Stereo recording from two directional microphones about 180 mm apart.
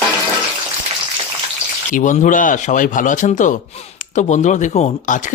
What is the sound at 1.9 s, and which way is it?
Speech, 45° left (ahead or behind).